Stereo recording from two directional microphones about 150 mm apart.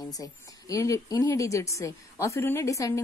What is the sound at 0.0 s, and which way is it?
A woman's voice, 25° left (ahead or behind).